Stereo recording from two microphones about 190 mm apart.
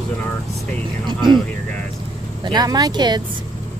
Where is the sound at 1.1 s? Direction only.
25° right (ahead or behind).